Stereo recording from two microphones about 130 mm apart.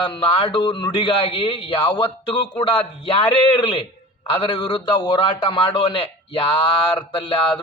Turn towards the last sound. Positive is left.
turn(degrees=40)  # may be behind; listen again after turning